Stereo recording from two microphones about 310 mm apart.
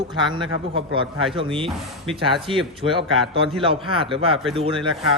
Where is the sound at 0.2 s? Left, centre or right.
Centre.